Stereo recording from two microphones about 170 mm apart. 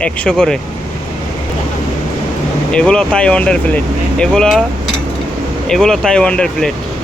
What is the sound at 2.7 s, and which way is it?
Speech, 5° left (ahead or behind).